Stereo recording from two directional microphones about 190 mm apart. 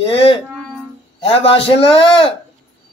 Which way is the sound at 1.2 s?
30° left (ahead or behind).